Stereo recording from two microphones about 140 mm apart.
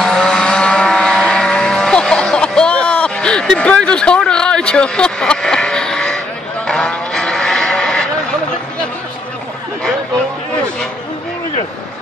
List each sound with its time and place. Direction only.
0.0 s vehicle: 5° left (ahead or behind)